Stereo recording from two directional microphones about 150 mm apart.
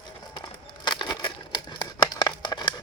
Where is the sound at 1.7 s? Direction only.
30° left (ahead or behind).